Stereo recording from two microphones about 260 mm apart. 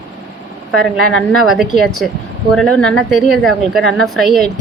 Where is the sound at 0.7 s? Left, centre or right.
Centre.